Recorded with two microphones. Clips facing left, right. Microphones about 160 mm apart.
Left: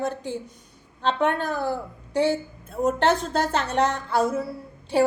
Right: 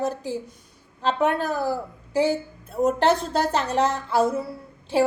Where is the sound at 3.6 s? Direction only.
35° right (ahead or behind).